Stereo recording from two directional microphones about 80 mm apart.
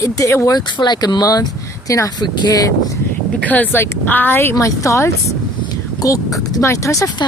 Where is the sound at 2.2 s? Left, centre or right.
Left.